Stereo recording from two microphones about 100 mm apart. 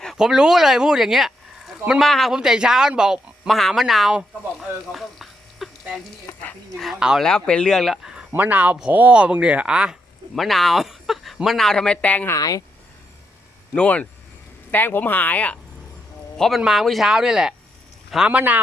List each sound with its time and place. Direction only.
0.2 s speech: 5° right (ahead or behind)
4.9 s electric shaver: centre (ahead or behind)
7.2 s speech: 5° left (ahead or behind)
8.3 s speech: 15° right (ahead or behind); by 12.3 s 15° left (ahead or behind)
12.3 s speech: 35° left (ahead or behind)
13.7 s speech: 15° left (ahead or behind)
16.6 s speech: 5° right (ahead or behind)